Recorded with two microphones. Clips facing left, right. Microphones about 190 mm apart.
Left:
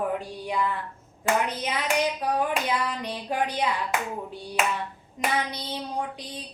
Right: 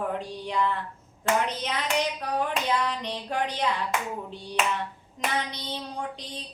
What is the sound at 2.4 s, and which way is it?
Hands, 5° left (ahead or behind).